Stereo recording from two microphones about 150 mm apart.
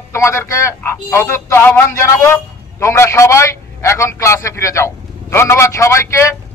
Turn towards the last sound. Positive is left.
turn(degrees=15)  # may be behind; listen again after turning